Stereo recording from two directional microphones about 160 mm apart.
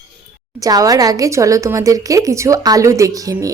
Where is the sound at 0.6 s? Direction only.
25° right (ahead or behind).